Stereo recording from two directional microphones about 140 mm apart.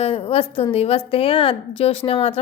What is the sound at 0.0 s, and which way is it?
A woman's voice, 45° left (ahead or behind).